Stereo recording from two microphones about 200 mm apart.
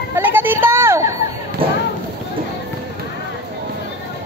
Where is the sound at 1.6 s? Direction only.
25° right (ahead or behind).